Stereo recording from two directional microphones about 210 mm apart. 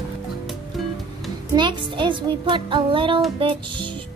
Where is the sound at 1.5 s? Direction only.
20° right (ahead or behind).